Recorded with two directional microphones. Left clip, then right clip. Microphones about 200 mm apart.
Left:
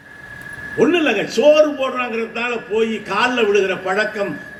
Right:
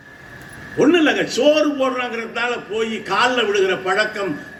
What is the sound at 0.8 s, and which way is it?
Speech, 15° right (ahead or behind).